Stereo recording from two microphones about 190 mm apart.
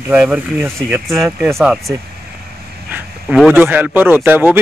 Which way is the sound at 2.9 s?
Centre (ahead or behind).